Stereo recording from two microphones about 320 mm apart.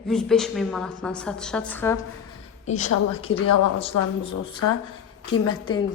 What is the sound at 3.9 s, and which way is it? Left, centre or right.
Speech, left.